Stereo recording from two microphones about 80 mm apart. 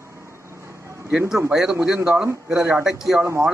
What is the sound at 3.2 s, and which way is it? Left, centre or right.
Speech, right.